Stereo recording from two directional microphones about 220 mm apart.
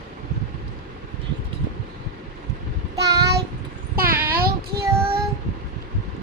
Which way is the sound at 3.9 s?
40° right (ahead or behind).